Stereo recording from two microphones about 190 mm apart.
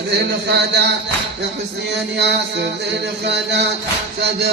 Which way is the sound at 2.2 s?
65° right (ahead or behind).